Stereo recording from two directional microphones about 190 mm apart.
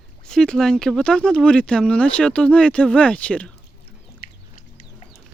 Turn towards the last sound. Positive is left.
turn(degrees=55)  # may be behind; listen again after turning